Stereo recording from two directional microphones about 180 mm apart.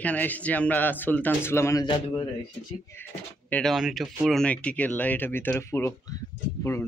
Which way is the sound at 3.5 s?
Centre (ahead or behind).